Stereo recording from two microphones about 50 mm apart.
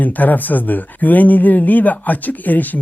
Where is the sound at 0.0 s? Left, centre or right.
Left.